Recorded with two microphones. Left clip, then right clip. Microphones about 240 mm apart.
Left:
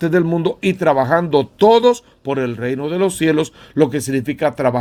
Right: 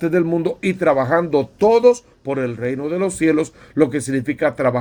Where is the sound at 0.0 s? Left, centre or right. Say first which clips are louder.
Left 1 dB; left.